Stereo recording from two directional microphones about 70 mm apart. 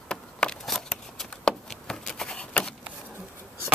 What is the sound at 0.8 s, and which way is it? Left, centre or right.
Shuffling cards, centre.